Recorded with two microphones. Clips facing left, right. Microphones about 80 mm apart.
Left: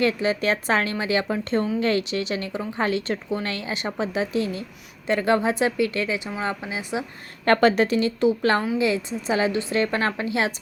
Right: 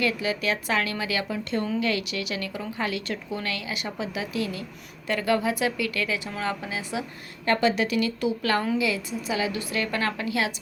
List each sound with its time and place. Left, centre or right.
0.0 s a woman's voice: left
7.4 s speech: left
7.9 s a woman's voice: left